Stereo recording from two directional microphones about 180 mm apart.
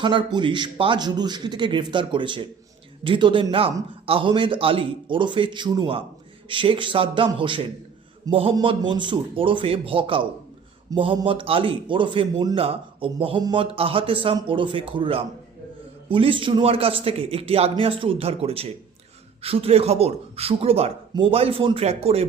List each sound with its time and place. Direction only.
0.0 s speech: 25° right (ahead or behind)